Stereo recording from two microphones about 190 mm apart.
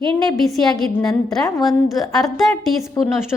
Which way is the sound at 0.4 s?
Centre (ahead or behind).